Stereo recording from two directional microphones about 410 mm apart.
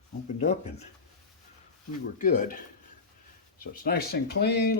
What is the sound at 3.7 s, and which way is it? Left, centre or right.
Speech, left.